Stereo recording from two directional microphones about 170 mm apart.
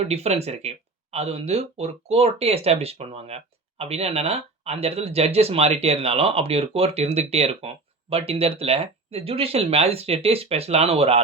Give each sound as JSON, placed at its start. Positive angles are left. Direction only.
{"t": 0.0, "sound": "speech", "side_deg": -40}